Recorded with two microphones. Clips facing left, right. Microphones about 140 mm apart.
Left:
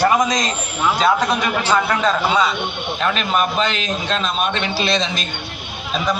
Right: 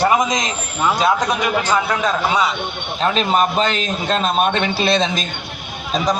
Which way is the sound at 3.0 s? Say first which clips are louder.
Right 3 dB; 35° right (ahead or behind).